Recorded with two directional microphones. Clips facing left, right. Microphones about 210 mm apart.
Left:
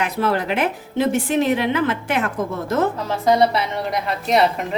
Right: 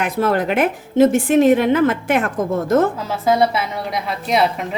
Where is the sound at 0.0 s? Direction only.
50° right (ahead or behind).